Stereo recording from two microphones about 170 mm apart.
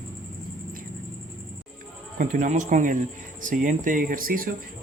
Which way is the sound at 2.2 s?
50° right (ahead or behind).